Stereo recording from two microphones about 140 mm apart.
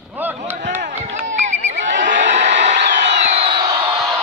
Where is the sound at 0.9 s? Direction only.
55° right (ahead or behind).